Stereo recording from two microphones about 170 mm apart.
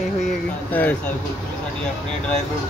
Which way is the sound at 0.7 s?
10° left (ahead or behind).